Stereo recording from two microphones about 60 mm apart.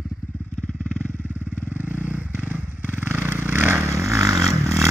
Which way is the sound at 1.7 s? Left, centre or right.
Right.